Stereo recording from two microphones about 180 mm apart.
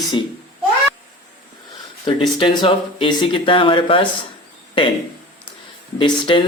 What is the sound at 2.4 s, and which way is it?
Speech, 25° left (ahead or behind).